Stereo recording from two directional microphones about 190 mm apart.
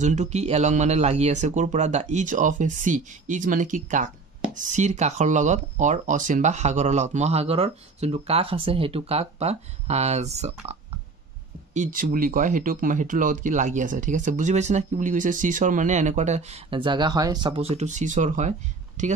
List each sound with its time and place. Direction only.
0.0 s speech: 40° right (ahead or behind)